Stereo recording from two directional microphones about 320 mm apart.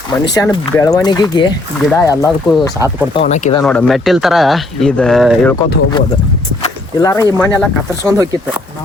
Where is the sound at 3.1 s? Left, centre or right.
Centre.